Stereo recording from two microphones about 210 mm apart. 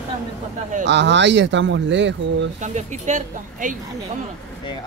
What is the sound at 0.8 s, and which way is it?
Speech, 55° right (ahead or behind).